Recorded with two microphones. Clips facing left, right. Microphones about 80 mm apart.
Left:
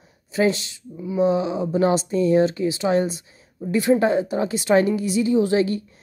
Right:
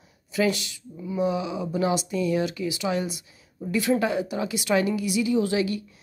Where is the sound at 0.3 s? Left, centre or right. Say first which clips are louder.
Left 4 dB; left.